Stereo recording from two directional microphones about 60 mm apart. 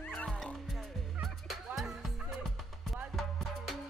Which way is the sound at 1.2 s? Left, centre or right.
Centre.